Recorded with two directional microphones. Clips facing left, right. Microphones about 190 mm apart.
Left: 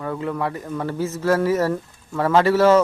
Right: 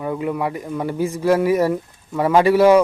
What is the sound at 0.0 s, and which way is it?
A man's voice, 15° right (ahead or behind).